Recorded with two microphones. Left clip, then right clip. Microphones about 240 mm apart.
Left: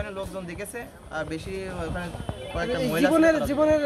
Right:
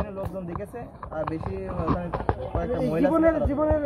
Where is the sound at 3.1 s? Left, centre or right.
Left.